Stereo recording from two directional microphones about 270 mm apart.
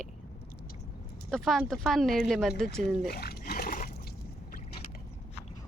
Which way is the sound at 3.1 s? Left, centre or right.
Left.